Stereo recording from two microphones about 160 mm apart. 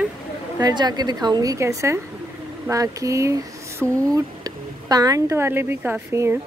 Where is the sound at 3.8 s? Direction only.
5° left (ahead or behind).